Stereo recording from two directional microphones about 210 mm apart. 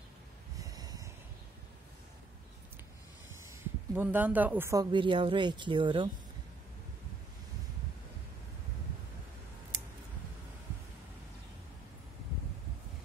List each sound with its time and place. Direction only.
0.6 s a sound: 15° right (ahead or behind)
3.4 s speech: 10° right (ahead or behind)
4.9 s speech: 25° right (ahead or behind)